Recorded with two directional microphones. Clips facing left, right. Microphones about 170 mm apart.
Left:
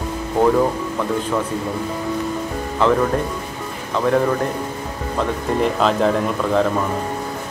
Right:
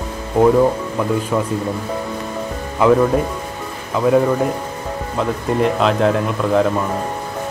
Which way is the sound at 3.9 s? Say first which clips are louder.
Right 3 dB; 10° right (ahead or behind).